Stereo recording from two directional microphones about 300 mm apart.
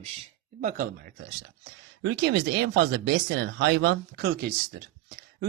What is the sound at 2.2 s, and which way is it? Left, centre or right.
Speech, right.